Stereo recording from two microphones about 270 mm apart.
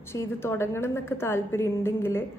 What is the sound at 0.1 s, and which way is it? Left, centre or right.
A woman's voice, centre.